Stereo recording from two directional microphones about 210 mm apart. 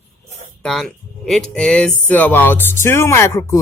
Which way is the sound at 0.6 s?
Centre (ahead or behind).